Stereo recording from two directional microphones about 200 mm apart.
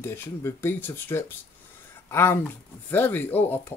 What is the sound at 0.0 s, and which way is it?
Speech, 10° left (ahead or behind).